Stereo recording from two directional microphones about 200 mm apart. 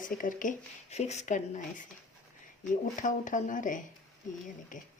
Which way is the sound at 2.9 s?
40° left (ahead or behind).